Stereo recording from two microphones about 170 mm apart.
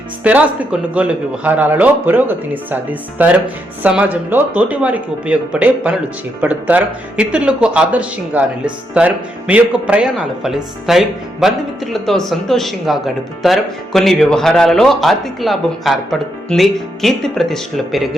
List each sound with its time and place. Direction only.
0.3 s speech: 10° right (ahead or behind)